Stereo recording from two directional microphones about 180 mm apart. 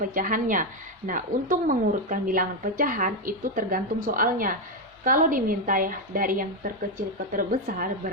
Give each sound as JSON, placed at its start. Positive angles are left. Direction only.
{"t": 0.1, "sound": "a woman's voice", "side_deg": -50}